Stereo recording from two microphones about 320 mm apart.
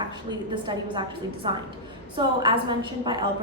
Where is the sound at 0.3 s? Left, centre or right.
Centre.